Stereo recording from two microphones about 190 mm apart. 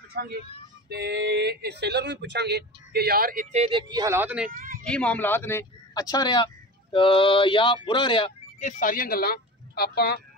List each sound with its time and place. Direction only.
0.1 s speech: 55° right (ahead or behind)
3.5 s speech: 35° right (ahead or behind)
3.9 s speech: 15° right (ahead or behind)
4.5 s a sound: 45° right (ahead or behind)
4.8 s a man's voice: 5° left (ahead or behind); by 8.3 s 25° left (ahead or behind)
8.5 s speech: 45° left (ahead or behind); by 10.2 s 60° left (ahead or behind)